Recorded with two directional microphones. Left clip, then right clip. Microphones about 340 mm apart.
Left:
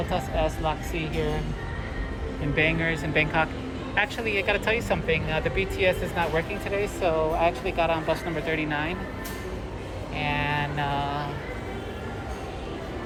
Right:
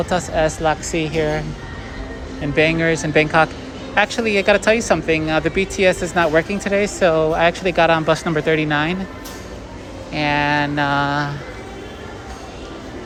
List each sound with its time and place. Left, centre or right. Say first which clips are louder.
0.1 s speech: right 8 dB; centre
2.6 s speech: right 8 dB; centre
7.1 s speech: right 5 dB; right
7.4 s speech: right 9 dB; right
10.2 s speech: right 10 dB; centre